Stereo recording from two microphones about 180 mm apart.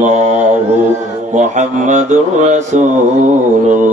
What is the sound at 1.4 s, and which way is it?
Mantra, 40° right (ahead or behind).